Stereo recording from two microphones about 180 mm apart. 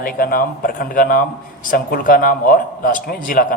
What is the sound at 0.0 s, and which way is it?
A man's voice, 55° left (ahead or behind).